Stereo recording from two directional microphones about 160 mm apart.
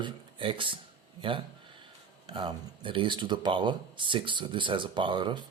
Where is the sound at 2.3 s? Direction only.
30° right (ahead or behind).